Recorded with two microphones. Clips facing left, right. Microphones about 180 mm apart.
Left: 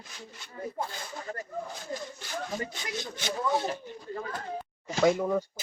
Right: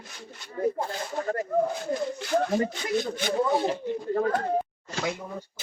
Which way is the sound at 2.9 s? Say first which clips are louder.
Right 10 dB; 55° right (ahead or behind).